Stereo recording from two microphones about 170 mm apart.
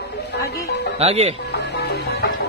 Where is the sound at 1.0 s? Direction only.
35° right (ahead or behind).